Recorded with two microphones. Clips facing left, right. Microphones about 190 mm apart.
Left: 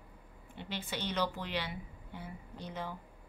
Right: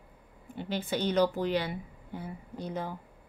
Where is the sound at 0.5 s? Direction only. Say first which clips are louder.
Right 8 dB; 40° right (ahead or behind).